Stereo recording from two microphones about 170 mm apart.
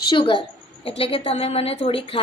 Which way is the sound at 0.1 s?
30° left (ahead or behind).